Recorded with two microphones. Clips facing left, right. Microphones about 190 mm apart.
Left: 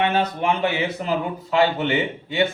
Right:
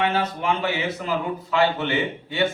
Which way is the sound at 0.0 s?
20° left (ahead or behind).